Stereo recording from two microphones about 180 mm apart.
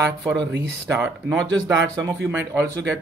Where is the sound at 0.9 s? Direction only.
5° right (ahead or behind).